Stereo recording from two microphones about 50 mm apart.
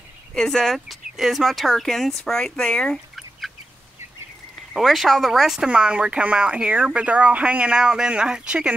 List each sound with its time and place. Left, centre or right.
0.3 s speech: centre
3.2 s duck: centre
4.7 s speech: centre
5.7 s speech: right